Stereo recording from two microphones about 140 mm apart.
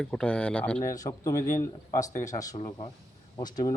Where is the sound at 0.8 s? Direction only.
25° left (ahead or behind).